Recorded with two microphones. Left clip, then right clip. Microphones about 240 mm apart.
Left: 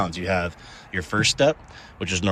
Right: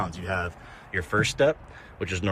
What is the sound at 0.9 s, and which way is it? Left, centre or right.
Speech, centre.